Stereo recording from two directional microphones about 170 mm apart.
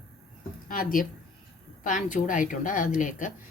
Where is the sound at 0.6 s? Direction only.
55° left (ahead or behind).